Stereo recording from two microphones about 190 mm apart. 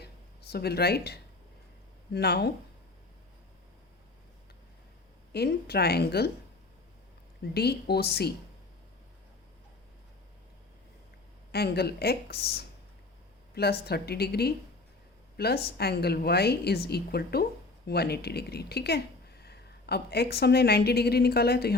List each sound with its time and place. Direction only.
0.0 s a sound: 55° left (ahead or behind)
2.1 s a woman's voice: 60° left (ahead or behind)
5.3 s a woman's voice: 55° left (ahead or behind)
7.5 s a woman's voice: 55° left (ahead or behind)
11.5 s a woman's voice: 55° left (ahead or behind)
13.5 s a woman's voice: 55° left (ahead or behind)